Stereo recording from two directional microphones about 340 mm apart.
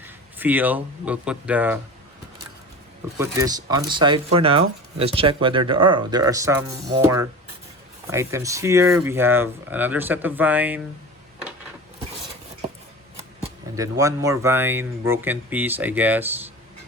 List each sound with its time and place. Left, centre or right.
0.0 s speech: centre
3.2 s speech: centre
13.1 s speech: centre